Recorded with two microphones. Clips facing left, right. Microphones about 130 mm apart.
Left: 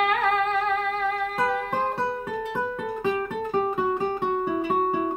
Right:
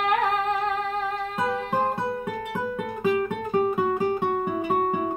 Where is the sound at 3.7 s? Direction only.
10° right (ahead or behind).